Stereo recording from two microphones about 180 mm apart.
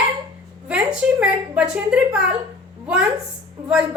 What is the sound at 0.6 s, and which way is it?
A woman's voice, 5° right (ahead or behind).